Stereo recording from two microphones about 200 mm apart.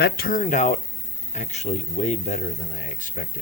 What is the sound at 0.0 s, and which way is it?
Speech, 45° left (ahead or behind).